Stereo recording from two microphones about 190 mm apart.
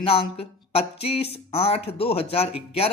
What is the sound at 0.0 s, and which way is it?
A man's voice, 30° left (ahead or behind).